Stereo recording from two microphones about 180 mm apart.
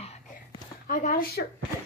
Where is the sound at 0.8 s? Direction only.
50° left (ahead or behind).